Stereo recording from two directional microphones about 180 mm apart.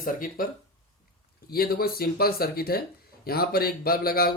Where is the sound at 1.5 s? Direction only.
55° left (ahead or behind).